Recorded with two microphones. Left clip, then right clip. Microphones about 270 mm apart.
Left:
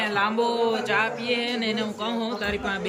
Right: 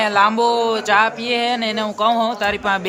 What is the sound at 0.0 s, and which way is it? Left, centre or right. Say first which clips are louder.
Speech: right 9 dB; centre.